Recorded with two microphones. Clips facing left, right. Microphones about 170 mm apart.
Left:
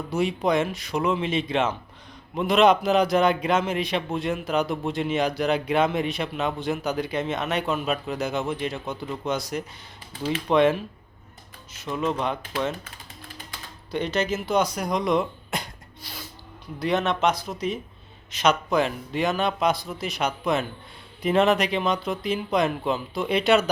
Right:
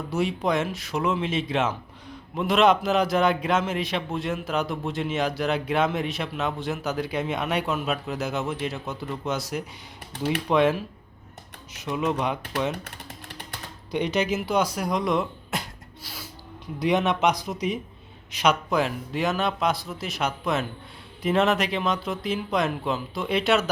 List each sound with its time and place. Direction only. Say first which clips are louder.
0.1 s a man's voice: left 2 dB; centre (ahead or behind)
10.1 s speech: right 1 dB; 65° right (ahead or behind)
10.5 s a man's voice: left 2 dB; 5° right (ahead or behind)
11.9 s speech: even; 10° right (ahead or behind)
13.9 s a man's voice: right 1 dB; 15° right (ahead or behind)